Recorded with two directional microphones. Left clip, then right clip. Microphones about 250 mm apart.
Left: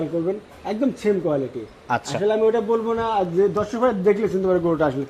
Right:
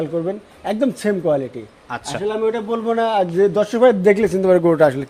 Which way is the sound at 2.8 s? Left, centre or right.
Right.